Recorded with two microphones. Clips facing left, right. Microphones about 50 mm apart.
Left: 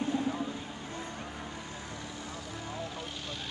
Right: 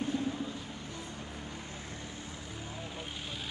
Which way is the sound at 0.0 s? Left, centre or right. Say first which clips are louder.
Left 2 dB; left.